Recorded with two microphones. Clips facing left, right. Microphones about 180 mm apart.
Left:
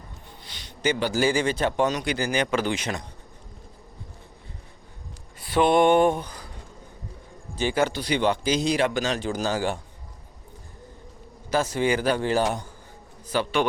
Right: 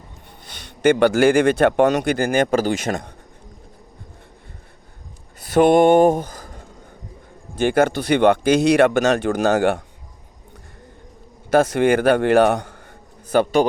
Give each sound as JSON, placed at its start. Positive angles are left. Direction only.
{"t": 0.6, "sound": "speech", "side_deg": -60}
{"t": 5.4, "sound": "speech", "side_deg": -45}
{"t": 11.5, "sound": "speech", "side_deg": -55}
{"t": 13.3, "sound": "a man's voice", "side_deg": -45}